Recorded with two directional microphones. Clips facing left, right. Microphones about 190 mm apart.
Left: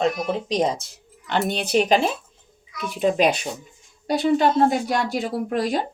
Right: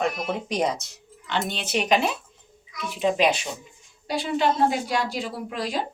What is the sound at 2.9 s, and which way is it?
Speech, 45° left (ahead or behind).